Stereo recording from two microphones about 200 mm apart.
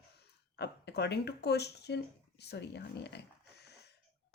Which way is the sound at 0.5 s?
55° left (ahead or behind).